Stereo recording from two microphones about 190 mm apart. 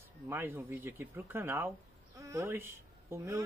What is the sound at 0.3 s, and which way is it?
Speech, 10° right (ahead or behind).